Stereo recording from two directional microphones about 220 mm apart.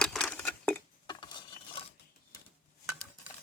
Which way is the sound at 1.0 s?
20° left (ahead or behind).